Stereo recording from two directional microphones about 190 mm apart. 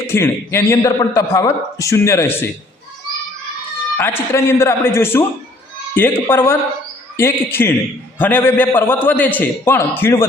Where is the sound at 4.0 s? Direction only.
10° left (ahead or behind).